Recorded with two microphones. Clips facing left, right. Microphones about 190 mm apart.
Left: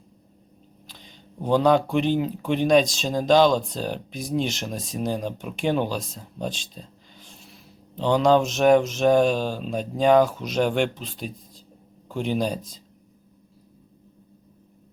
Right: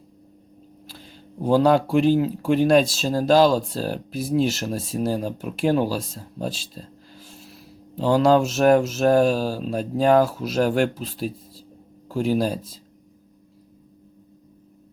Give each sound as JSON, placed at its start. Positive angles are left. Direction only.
{"t": 0.9, "sound": "speech", "side_deg": -5}